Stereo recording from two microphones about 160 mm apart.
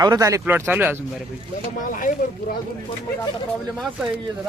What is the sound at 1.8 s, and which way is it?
Speech, 55° left (ahead or behind).